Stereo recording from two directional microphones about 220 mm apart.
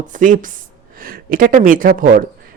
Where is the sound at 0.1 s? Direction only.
35° right (ahead or behind).